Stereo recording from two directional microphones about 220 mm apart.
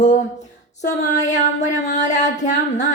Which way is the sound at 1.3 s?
35° left (ahead or behind).